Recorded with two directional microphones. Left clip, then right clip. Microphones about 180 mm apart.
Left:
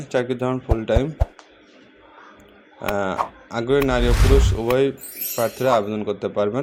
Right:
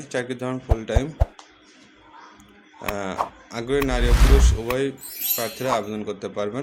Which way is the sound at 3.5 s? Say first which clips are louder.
Left 6 dB; 20° left (ahead or behind).